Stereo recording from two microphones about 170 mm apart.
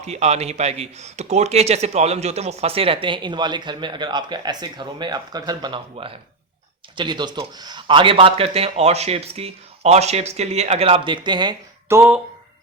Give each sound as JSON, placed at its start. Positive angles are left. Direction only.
{"t": 0.0, "sound": "speech", "side_deg": -40}